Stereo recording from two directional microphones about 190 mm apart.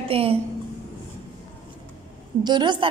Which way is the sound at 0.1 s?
30° right (ahead or behind).